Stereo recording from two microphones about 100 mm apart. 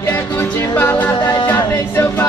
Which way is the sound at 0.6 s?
25° left (ahead or behind).